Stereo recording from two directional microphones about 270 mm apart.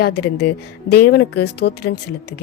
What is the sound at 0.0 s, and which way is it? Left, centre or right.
Speech, left.